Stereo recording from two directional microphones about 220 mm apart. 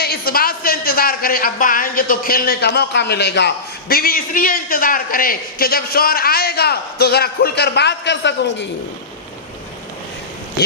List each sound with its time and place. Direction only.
0.0 s speech: 45° left (ahead or behind)